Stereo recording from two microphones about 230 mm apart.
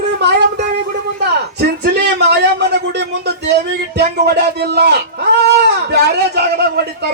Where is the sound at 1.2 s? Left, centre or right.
Right.